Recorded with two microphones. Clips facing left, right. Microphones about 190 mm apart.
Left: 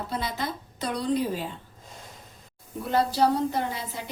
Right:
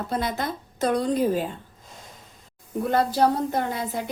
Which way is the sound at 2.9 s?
50° right (ahead or behind).